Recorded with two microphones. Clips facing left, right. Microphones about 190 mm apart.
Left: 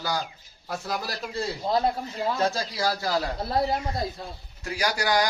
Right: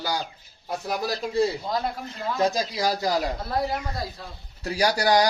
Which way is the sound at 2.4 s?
15° right (ahead or behind).